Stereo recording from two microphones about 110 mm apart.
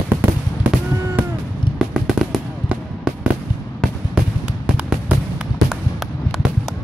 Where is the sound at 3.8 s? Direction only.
5° left (ahead or behind).